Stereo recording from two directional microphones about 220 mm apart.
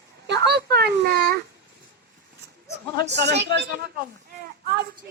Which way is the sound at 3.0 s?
50° right (ahead or behind).